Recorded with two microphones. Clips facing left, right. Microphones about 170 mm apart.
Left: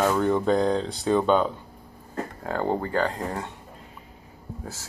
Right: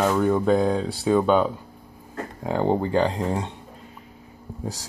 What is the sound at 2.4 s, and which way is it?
Speech, 20° right (ahead or behind).